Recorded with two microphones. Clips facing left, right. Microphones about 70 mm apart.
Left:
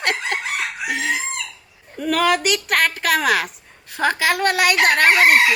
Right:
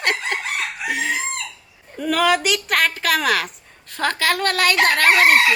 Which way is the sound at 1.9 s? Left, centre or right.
Centre.